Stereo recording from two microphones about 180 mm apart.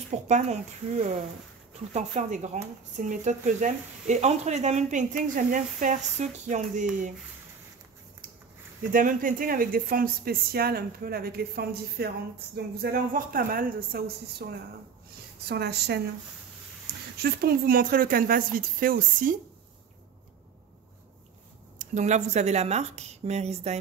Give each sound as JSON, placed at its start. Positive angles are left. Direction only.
{"t": 0.1, "sound": "speech", "side_deg": -40}
{"t": 8.9, "sound": "speech", "side_deg": -50}
{"t": 16.9, "sound": "a sound", "side_deg": -65}
{"t": 17.2, "sound": "speech", "side_deg": -60}
{"t": 21.7, "sound": "speech", "side_deg": -40}